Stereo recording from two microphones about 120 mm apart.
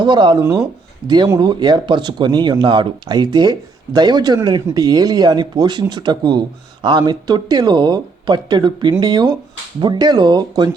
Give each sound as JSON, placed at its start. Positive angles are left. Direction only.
{"t": 0.0, "sound": "speech", "side_deg": -40}